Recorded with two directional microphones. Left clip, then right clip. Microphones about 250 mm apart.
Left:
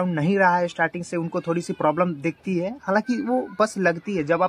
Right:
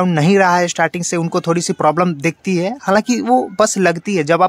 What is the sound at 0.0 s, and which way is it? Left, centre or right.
Speech, right.